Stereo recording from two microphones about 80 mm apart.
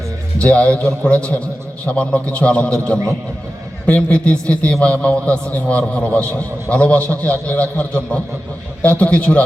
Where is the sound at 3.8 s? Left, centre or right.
Centre.